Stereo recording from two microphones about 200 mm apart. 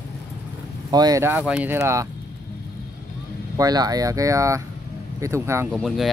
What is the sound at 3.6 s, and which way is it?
Speech, 20° right (ahead or behind).